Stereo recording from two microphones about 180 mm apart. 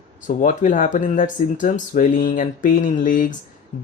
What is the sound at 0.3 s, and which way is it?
Speech, 45° left (ahead or behind).